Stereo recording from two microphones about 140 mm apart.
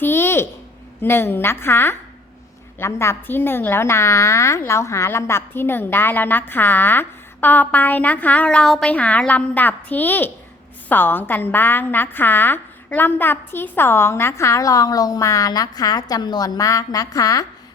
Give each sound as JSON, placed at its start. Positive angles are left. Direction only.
{"t": 0.0, "sound": "a woman's voice", "side_deg": 15}